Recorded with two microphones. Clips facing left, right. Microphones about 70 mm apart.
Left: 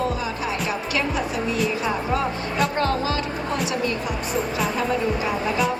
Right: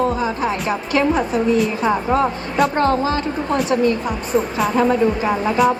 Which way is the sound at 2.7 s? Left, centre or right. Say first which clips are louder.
Right 5 dB; right.